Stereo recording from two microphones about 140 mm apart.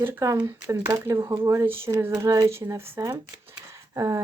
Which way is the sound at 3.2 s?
20° right (ahead or behind).